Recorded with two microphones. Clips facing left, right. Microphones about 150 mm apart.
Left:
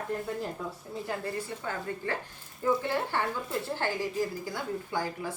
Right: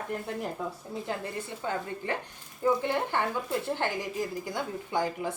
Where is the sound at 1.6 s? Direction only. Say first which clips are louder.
Right 4 dB; 20° right (ahead or behind).